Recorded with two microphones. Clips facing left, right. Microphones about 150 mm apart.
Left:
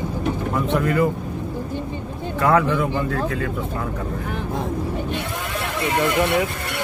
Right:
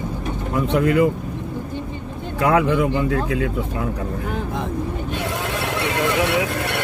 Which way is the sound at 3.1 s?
50° left (ahead or behind).